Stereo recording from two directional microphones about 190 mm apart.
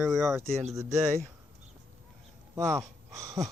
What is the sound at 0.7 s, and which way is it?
Speech, 15° right (ahead or behind).